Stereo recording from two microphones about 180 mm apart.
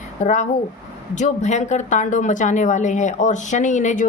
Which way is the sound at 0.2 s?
45° left (ahead or behind).